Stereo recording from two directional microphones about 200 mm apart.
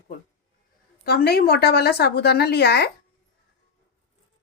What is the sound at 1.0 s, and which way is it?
A woman's voice, 50° left (ahead or behind).